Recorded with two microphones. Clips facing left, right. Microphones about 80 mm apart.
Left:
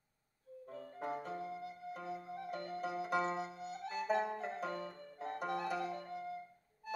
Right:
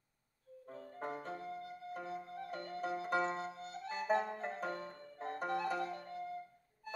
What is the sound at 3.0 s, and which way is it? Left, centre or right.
Music, right.